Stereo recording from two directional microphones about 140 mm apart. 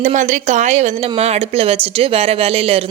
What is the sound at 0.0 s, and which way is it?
A woman's voice, 60° right (ahead or behind).